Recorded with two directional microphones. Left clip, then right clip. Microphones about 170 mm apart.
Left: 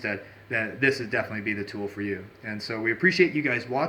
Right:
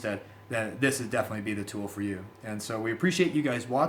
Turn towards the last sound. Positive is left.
turn(degrees=-25)  # may be behind; listen again after turning